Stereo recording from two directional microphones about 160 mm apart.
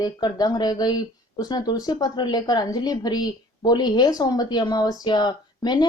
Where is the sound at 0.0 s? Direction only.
25° left (ahead or behind).